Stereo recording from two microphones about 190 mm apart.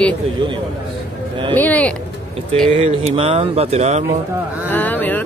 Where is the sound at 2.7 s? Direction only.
30° right (ahead or behind).